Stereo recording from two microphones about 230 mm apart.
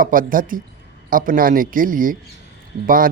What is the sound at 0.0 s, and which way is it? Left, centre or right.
A man's voice, right.